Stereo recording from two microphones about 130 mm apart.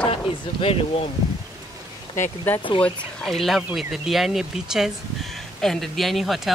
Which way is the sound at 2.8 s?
Centre (ahead or behind).